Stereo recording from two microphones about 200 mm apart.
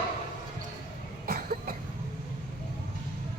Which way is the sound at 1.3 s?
45° right (ahead or behind).